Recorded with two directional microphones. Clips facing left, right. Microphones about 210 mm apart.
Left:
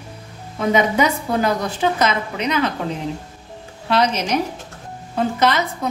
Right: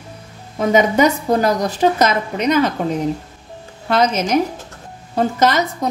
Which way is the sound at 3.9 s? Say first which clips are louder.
Right 2 dB; 45° right (ahead or behind).